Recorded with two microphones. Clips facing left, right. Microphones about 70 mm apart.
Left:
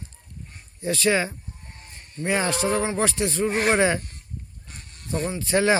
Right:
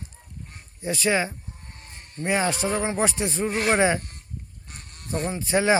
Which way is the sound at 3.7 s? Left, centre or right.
Centre.